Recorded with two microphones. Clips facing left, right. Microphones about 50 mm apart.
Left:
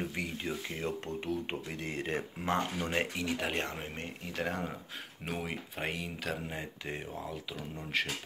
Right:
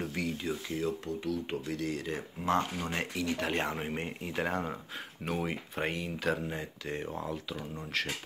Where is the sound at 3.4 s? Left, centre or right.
Centre.